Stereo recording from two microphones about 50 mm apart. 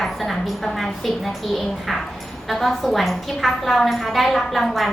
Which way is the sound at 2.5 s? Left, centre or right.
Centre.